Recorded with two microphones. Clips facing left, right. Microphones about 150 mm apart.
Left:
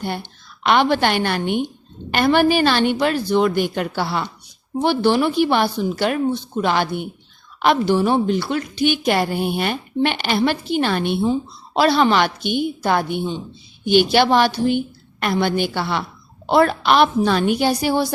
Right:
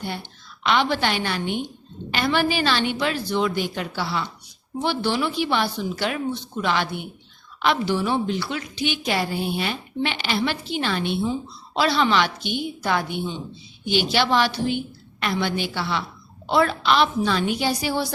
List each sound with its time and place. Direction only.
0.6 s a woman's voice: 55° left (ahead or behind)